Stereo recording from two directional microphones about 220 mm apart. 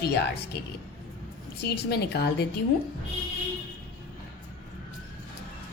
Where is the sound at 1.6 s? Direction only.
50° left (ahead or behind).